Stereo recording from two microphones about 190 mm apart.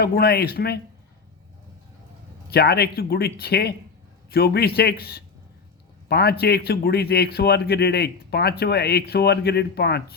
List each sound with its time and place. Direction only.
0.0 s a man's voice: 55° left (ahead or behind)
2.5 s a man's voice: 55° left (ahead or behind)